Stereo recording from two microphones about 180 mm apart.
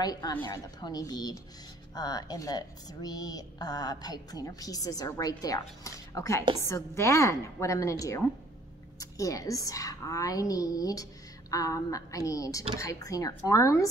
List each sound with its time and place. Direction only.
0.0 s a woman's voice: 20° left (ahead or behind)